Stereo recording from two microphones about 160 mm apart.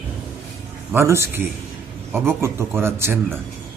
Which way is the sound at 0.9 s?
15° right (ahead or behind).